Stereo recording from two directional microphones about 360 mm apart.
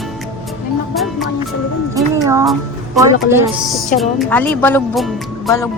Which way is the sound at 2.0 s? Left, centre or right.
Centre.